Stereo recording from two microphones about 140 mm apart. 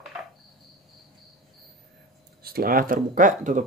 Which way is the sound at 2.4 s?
90° right.